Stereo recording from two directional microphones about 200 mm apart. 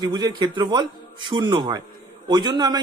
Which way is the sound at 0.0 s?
20° right (ahead or behind).